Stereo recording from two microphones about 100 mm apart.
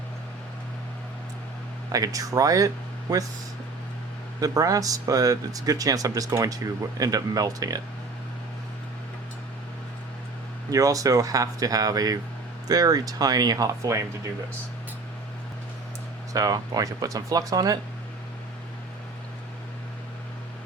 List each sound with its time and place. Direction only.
1.9 s speech: 35° right (ahead or behind)
4.4 s speech: 35° right (ahead or behind)
10.7 s speech: 35° right (ahead or behind)
16.3 s speech: 35° right (ahead or behind)